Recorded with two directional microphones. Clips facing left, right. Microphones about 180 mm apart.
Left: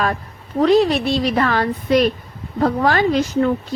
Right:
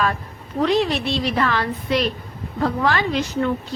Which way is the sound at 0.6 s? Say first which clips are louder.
Left 5 dB; 40° left (ahead or behind).